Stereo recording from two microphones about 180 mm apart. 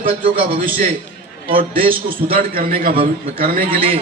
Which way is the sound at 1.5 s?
55° right (ahead or behind).